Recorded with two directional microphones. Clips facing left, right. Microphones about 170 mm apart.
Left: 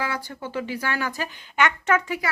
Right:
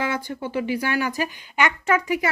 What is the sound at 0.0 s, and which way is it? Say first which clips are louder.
A woman's voice: right 3 dB; 20° right (ahead or behind).